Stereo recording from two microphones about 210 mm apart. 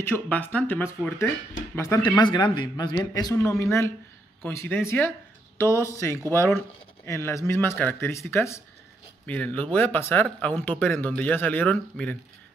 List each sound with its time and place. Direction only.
0.0 s speech: 10° left (ahead or behind)